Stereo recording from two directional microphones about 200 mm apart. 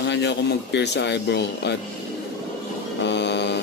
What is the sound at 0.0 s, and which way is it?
Speech, 60° left (ahead or behind).